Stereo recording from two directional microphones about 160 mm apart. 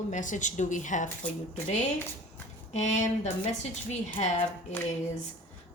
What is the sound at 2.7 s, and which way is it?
Speech, 45° left (ahead or behind).